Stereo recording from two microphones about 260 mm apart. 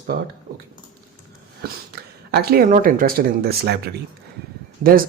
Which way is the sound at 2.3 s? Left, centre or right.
Right.